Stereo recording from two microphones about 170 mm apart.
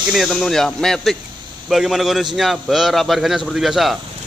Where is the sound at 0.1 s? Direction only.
Centre (ahead or behind).